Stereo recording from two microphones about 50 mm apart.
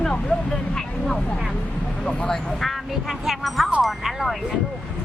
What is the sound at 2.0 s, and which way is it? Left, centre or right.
Speech, centre.